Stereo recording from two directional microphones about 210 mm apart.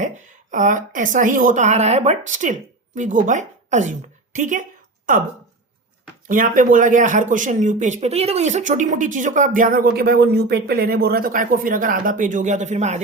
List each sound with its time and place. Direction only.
0.5 s speech: 35° right (ahead or behind)
6.2 s speech: 40° right (ahead or behind)